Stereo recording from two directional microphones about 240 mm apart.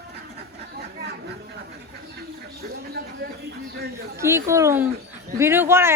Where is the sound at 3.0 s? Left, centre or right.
Right.